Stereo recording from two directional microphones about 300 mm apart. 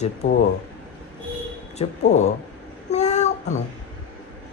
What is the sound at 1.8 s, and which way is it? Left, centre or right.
Speech, left.